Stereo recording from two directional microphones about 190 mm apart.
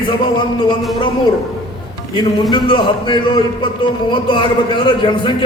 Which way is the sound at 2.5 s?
25° left (ahead or behind).